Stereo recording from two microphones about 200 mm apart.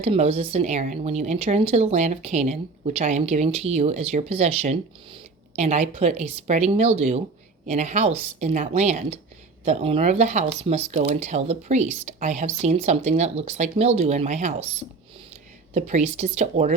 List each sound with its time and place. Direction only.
0.0 s a woman's voice: 30° right (ahead or behind)